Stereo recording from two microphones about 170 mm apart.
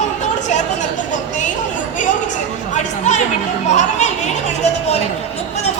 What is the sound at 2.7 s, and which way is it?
Chatter, 45° left (ahead or behind).